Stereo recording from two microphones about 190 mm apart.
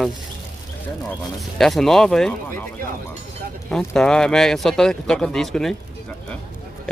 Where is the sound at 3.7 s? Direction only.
5° left (ahead or behind).